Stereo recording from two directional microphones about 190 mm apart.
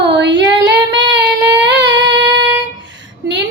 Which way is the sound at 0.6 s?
25° right (ahead or behind).